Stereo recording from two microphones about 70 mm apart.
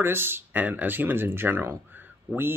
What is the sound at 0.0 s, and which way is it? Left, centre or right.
Speech, right.